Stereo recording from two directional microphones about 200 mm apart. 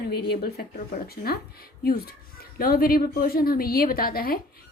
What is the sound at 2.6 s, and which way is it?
Speech, 45° left (ahead or behind).